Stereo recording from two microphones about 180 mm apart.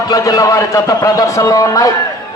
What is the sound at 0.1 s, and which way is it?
A man's voice, 20° left (ahead or behind).